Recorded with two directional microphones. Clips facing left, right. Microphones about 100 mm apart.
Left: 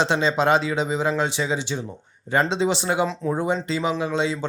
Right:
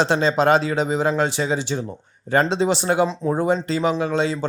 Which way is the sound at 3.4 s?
45° right (ahead or behind).